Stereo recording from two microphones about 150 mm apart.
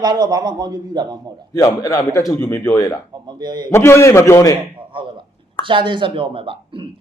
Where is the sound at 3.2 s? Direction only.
30° right (ahead or behind).